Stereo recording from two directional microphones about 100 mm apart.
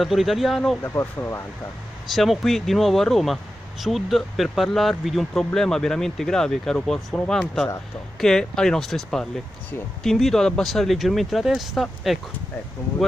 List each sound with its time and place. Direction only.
0.0 s speech: centre (ahead or behind)
0.8 s speech: 25° left (ahead or behind)
2.1 s speech: centre (ahead or behind)